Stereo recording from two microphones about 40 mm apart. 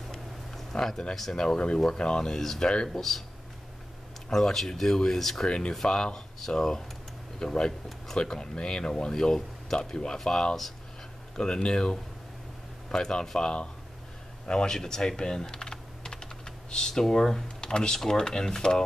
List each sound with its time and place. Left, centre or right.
0.1 s a sound: centre
1.3 s speech: centre
4.3 s speech: centre
5.5 s speech: left
14.5 s speech: left
14.8 s typing: centre
17.1 s speech: centre